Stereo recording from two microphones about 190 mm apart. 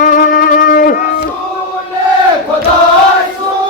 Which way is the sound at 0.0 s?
45° left (ahead or behind).